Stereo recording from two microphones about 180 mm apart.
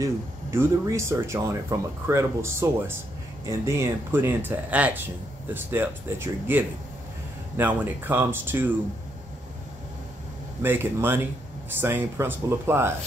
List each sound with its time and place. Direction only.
0.0 s speech: 15° right (ahead or behind)
10.6 s speech: 10° right (ahead or behind)